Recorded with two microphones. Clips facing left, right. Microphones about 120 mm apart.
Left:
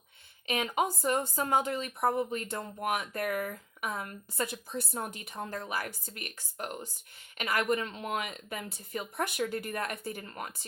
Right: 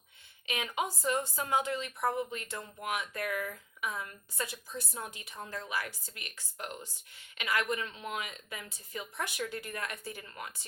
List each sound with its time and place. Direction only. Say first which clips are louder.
0.4 s speech: left 5 dB; 40° left (ahead or behind)